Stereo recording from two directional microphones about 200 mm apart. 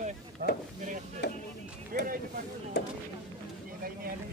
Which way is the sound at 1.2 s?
60° left (ahead or behind).